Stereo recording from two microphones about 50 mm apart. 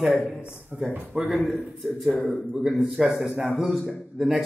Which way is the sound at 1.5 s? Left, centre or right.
Centre.